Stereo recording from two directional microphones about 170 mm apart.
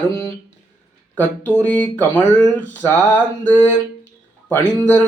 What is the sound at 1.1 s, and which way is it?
Speech, 10° left (ahead or behind).